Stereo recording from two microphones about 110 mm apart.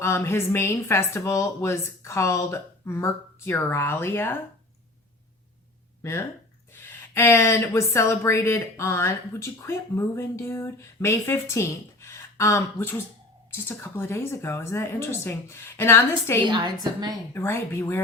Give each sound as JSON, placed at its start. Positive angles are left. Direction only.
{"t": 0.0, "sound": "speech", "side_deg": 25}
{"t": 6.0, "sound": "speech", "side_deg": 25}
{"t": 16.5, "sound": "a woman's voice", "side_deg": -40}
{"t": 17.3, "sound": "speech", "side_deg": 20}